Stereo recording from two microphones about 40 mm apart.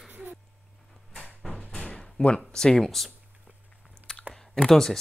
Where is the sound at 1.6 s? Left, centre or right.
Left.